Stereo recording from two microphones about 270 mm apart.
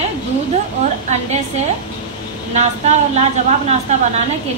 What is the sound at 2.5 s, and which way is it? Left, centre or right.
A woman's voice, right.